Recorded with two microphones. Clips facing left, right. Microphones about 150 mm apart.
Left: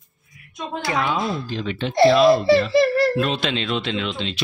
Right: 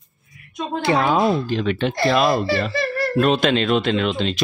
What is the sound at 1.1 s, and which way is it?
Speech, 60° right (ahead or behind).